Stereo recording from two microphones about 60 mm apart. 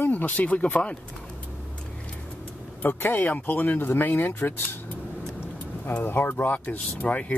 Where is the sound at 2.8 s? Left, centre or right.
Left.